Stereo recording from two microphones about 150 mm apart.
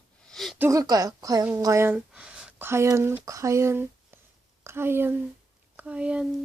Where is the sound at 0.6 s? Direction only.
20° right (ahead or behind).